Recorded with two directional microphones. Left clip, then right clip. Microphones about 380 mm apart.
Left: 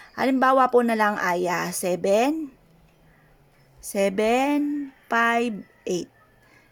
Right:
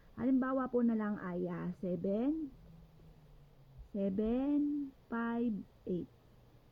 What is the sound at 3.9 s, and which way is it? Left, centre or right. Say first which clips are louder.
A woman's voice: left 16 dB; centre.